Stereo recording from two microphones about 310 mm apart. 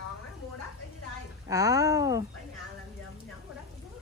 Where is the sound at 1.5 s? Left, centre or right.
Centre.